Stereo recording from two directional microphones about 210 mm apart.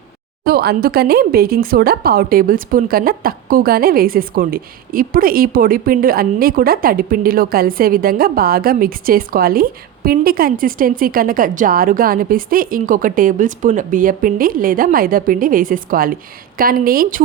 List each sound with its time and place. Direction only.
0.4 s speech: 45° right (ahead or behind)